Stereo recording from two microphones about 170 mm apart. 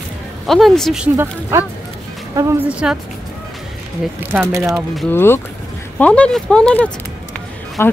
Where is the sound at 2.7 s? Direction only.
5° right (ahead or behind).